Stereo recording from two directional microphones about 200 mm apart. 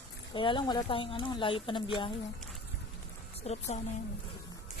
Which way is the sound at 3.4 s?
35° left (ahead or behind).